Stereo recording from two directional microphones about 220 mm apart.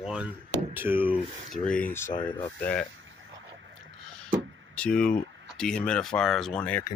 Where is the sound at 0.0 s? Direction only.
Centre (ahead or behind).